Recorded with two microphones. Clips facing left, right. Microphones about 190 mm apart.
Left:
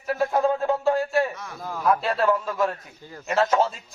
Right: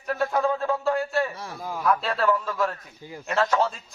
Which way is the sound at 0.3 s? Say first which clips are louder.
Left 3 dB; 20° left (ahead or behind).